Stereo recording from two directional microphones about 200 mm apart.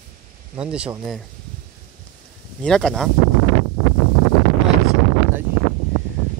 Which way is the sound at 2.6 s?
5° left (ahead or behind).